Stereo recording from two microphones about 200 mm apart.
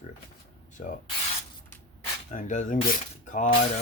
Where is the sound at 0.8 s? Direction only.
45° left (ahead or behind).